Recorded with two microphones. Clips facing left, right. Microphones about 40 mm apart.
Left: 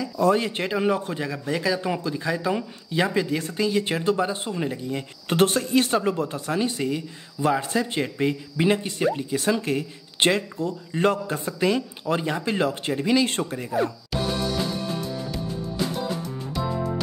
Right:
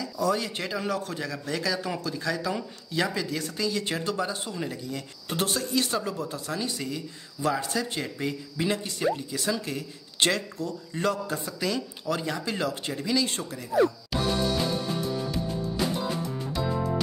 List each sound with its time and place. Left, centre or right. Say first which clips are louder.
0.2 s speech: left 6 dB; left
5.3 s speech: left 7 dB; left
14.1 s music: left 1 dB; centre